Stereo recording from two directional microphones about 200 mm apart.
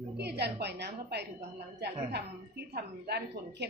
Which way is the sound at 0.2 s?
55° right (ahead or behind).